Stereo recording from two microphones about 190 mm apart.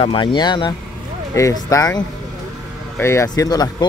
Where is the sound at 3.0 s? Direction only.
15° left (ahead or behind).